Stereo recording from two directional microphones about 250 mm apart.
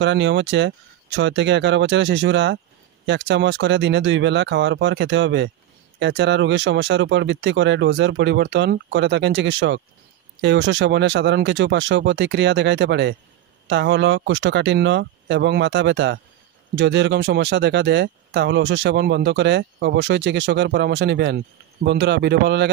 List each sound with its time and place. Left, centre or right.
0.0 s speech: right